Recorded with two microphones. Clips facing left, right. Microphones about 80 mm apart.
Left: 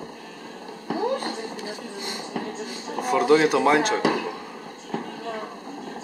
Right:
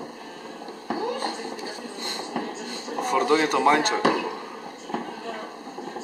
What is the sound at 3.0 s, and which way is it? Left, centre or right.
Speech, centre.